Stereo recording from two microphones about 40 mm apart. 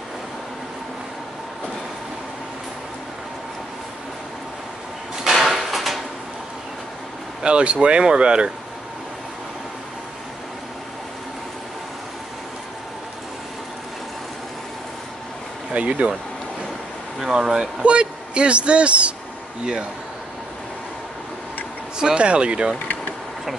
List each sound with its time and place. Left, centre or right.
5.3 s a sound: centre
7.4 s a woman's voice: right
15.7 s speech: right
17.2 s speech: centre
17.8 s a woman's voice: right
21.9 s a woman's voice: right